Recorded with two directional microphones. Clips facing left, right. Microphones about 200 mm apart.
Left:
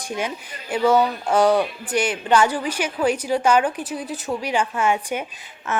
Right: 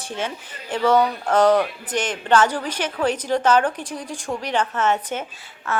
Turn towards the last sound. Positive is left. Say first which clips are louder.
# even
turn(degrees=20)  # may be behind; listen again after turning